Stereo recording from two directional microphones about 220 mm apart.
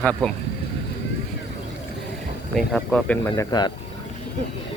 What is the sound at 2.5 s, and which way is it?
Speech, 5° left (ahead or behind).